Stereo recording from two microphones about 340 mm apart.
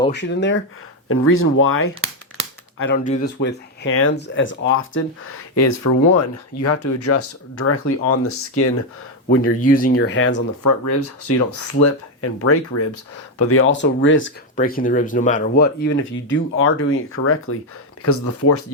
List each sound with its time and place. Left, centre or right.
0.1 s speech: left
2.7 s speech: left
3.0 s speech: left
3.3 s speech: left
5.5 s speech: left
9.3 s speech: left